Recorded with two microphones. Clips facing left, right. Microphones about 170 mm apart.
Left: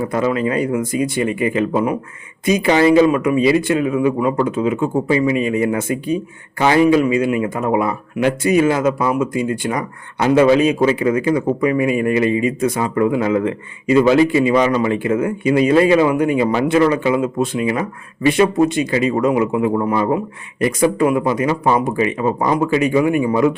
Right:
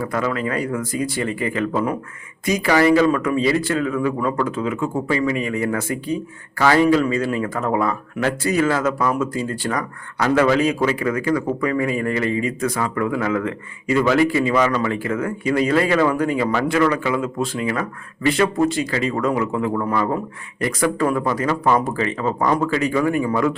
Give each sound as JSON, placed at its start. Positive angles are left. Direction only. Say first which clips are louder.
{"t": 0.0, "sound": "speech", "louder": "left 5 dB", "side_deg": 25}